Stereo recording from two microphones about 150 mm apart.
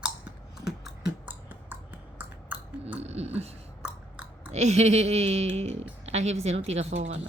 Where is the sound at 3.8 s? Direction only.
5° right (ahead or behind).